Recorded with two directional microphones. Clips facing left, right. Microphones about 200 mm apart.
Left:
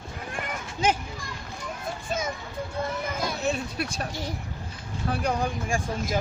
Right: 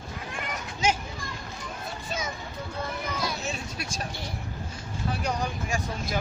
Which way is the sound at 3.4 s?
60° left (ahead or behind).